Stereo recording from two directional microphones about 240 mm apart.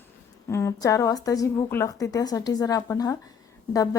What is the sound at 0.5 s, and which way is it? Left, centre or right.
A woman's voice, centre.